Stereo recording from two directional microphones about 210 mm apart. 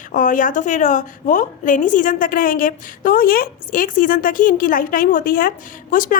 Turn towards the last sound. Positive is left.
turn(degrees=40)  # may be behind; listen again after turning